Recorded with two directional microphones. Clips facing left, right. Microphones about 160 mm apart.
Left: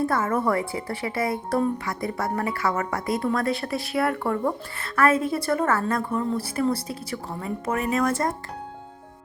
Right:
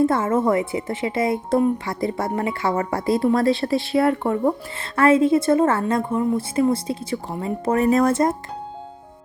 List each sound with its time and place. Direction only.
0.0 s a woman's voice: 25° right (ahead or behind)
8.1 s a woman's voice: 20° right (ahead or behind)